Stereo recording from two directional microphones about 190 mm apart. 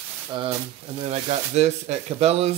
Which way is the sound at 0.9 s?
35° right (ahead or behind).